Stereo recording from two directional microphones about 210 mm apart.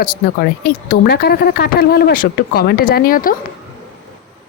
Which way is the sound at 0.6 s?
50° left (ahead or behind).